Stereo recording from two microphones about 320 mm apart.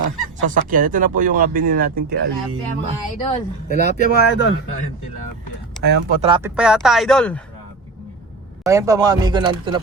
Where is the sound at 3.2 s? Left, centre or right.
Centre.